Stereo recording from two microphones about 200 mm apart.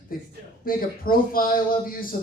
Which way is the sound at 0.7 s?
45° left (ahead or behind).